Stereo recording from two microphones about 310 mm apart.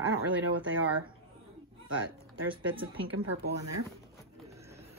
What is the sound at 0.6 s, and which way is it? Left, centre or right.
Speech, right.